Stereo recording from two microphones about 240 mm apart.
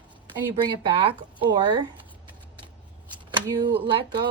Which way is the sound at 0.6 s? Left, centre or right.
Right.